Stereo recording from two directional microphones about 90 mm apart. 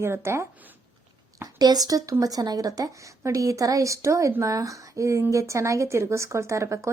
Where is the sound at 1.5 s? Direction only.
45° right (ahead or behind).